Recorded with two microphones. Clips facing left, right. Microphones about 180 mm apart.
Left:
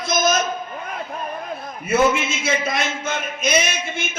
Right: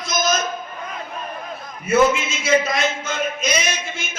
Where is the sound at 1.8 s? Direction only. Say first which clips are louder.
Right 1 dB; 55° left (ahead or behind).